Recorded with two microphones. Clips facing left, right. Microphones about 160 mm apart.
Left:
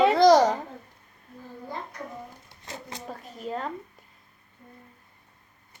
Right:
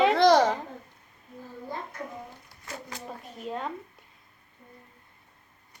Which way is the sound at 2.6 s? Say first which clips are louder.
Even; 25° left (ahead or behind).